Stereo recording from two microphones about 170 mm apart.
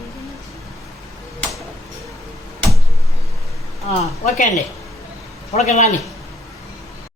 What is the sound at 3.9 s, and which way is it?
Speech, 45° left (ahead or behind).